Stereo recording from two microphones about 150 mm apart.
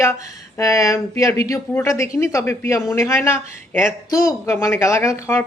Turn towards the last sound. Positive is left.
turn(degrees=20)  # may be behind; listen again after turning